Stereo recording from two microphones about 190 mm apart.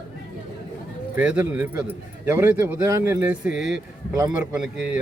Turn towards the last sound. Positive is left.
turn(degrees=-5)  # may be behind; listen again after turning